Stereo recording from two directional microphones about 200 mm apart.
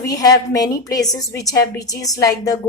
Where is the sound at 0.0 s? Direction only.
15° left (ahead or behind).